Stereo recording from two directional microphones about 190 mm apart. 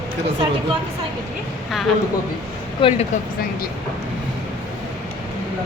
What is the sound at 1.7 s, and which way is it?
Speech, centre (ahead or behind).